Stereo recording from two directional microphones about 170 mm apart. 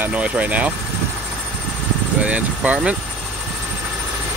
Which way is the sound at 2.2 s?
10° right (ahead or behind).